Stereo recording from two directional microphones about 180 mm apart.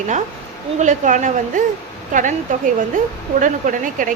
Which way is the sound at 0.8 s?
45° right (ahead or behind).